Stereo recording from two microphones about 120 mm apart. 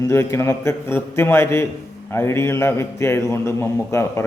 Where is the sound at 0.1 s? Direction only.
25° left (ahead or behind).